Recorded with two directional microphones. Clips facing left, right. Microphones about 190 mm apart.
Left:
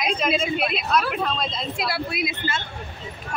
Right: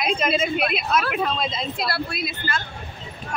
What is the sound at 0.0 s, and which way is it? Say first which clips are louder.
Speech: right 1 dB; 5° right (ahead or behind).